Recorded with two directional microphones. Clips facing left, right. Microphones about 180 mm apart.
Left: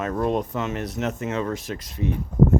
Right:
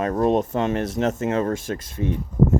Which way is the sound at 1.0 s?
45° right (ahead or behind).